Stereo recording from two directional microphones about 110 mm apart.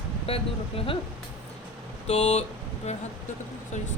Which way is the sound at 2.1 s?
80° left.